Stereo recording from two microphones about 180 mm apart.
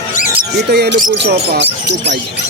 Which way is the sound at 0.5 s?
65° right (ahead or behind).